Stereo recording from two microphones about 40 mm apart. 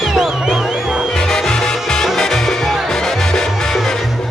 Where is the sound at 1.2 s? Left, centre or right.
Centre.